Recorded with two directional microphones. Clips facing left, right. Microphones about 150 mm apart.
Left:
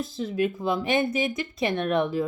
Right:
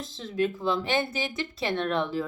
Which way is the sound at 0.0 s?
10° left (ahead or behind).